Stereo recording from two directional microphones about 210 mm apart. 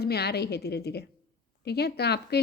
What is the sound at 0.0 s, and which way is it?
A woman's voice, 50° left (ahead or behind).